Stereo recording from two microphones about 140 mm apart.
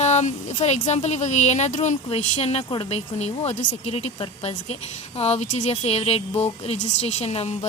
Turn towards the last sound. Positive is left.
turn(degrees=45)  # may be behind; listen again after turning